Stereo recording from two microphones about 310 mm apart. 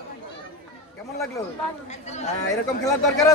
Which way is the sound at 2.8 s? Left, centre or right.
Centre.